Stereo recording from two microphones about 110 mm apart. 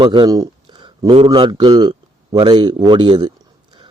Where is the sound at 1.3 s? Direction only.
45° right (ahead or behind).